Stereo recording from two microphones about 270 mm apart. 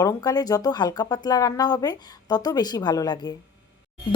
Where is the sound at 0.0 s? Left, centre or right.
Centre.